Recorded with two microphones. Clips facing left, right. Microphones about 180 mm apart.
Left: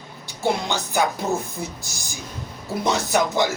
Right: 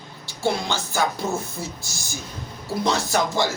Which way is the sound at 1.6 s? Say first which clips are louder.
Left 1 dB; 15° left (ahead or behind).